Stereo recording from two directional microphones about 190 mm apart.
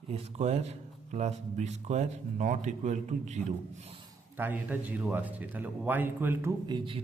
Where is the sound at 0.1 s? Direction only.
35° right (ahead or behind).